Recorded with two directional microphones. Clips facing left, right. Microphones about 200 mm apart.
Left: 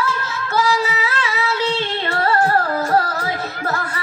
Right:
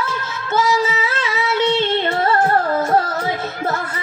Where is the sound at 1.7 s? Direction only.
20° right (ahead or behind).